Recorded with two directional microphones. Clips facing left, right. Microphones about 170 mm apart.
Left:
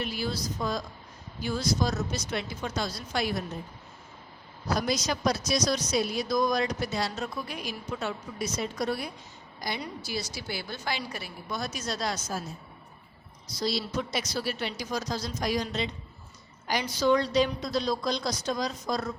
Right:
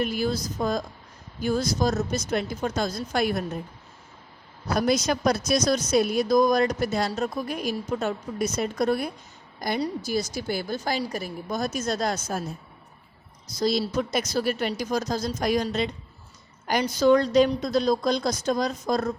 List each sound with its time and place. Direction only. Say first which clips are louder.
0.0 s a woman's voice: right 6 dB; 50° right (ahead or behind)
4.7 s a woman's voice: right 5 dB; 55° right (ahead or behind)
13.5 s a woman's voice: right 6 dB; 50° right (ahead or behind)
17.0 s a woman's voice: right 5 dB; 50° right (ahead or behind)